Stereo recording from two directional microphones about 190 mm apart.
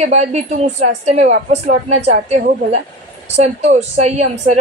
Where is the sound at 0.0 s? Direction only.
35° right (ahead or behind).